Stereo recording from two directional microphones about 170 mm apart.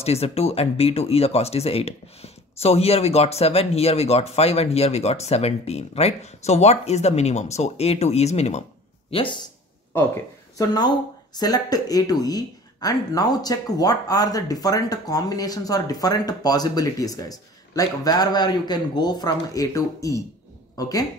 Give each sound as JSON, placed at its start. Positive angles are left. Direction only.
{"t": 0.0, "sound": "speech", "side_deg": 35}
{"t": 9.1, "sound": "speech", "side_deg": 30}
{"t": 11.3, "sound": "speech", "side_deg": 25}